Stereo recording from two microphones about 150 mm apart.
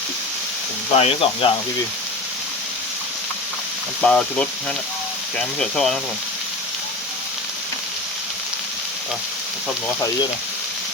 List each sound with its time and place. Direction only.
0.9 s speech: 40° left (ahead or behind)
4.0 s speech: 5° left (ahead or behind)